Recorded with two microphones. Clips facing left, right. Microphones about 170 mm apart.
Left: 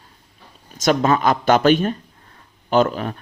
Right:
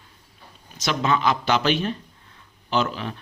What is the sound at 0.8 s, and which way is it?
A man's voice, 45° left (ahead or behind).